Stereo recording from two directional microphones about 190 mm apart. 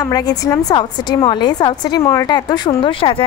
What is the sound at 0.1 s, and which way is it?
A woman's voice, 20° left (ahead or behind).